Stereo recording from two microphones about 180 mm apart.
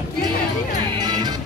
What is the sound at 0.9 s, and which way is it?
Music, 25° right (ahead or behind).